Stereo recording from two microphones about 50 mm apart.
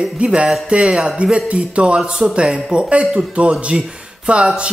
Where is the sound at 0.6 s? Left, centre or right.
Right.